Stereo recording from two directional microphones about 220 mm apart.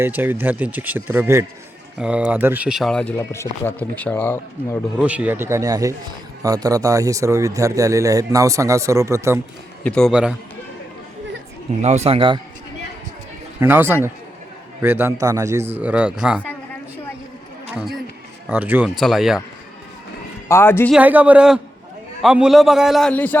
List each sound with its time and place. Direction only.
0.0 s speech: 10° right (ahead or behind); by 4.8 s 10° left (ahead or behind)
4.9 s speech: 5° right (ahead or behind)
9.8 s speech: 5° left (ahead or behind)
11.8 s speech: 30° right (ahead or behind)
13.6 s speech: 10° right (ahead or behind)
18.4 s speech: 5° right (ahead or behind)
20.5 s speech: 10° left (ahead or behind)
20.9 s speech: 5° right (ahead or behind)